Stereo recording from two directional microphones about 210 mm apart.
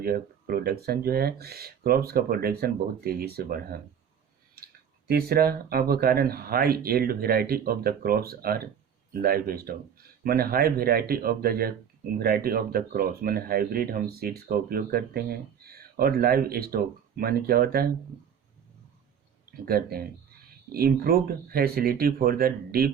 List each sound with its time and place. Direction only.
0.0 s speech: 45° right (ahead or behind)
19.6 s speech: 45° right (ahead or behind)